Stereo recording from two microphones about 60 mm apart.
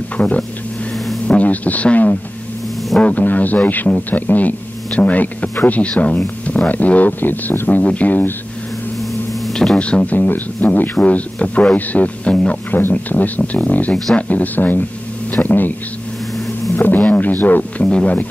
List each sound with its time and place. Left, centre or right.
1.2 s speech: left
9.3 s a sound: centre
9.8 s speech: centre
15.4 s a sound: left
16.7 s music: left
17.8 s speech: centre